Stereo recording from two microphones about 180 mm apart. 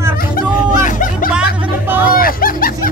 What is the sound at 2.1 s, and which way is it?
Music, 55° left (ahead or behind).